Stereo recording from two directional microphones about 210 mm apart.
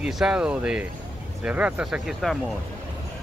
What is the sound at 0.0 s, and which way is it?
Speech, 5° right (ahead or behind).